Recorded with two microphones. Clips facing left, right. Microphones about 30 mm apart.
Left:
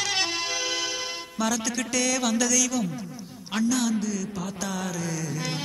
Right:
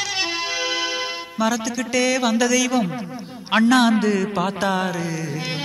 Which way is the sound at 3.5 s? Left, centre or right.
Right.